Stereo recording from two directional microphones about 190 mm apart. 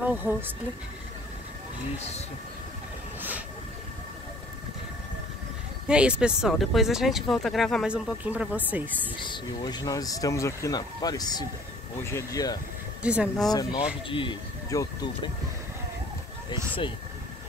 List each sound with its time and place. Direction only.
0.0 s speech: 10° right (ahead or behind)
2.0 s speech: 35° left (ahead or behind)
3.2 s train: 10° right (ahead or behind)
5.9 s speech: 5° right (ahead or behind)
9.2 s speech: 25° left (ahead or behind)
13.0 s speech: 5° right (ahead or behind)
13.5 s speech: 20° left (ahead or behind)